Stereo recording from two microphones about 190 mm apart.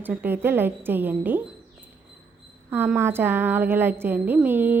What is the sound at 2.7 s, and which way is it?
A woman's voice, 10° right (ahead or behind).